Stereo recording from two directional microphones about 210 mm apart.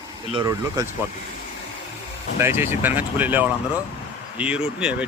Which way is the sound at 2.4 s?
10° right (ahead or behind).